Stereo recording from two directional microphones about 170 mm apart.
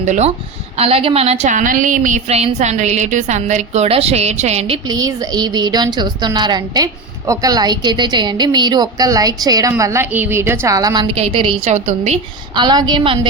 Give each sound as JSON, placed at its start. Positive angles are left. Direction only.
{"t": 0.0, "sound": "a woman's voice", "side_deg": -45}
{"t": 4.9, "sound": "a woman's voice", "side_deg": -20}
{"t": 11.1, "sound": "a woman's voice", "side_deg": -35}
{"t": 12.5, "sound": "a woman's voice", "side_deg": -25}